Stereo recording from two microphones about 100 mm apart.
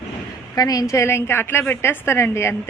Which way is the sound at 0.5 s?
40° left (ahead or behind).